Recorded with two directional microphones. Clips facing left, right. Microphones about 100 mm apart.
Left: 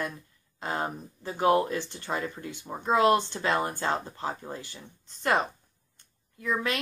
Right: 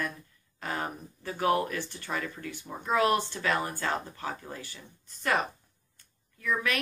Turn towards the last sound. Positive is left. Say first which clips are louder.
# left 1 dB
turn(degrees=25)  # may be behind; listen again after turning